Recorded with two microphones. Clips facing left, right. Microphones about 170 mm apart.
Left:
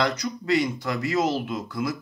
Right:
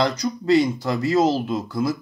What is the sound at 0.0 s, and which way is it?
Speech, 35° right (ahead or behind).